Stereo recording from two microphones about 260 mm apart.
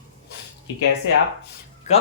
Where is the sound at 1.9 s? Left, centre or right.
Left.